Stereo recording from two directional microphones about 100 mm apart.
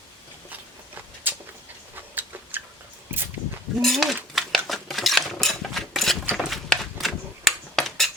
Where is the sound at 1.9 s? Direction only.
20° right (ahead or behind).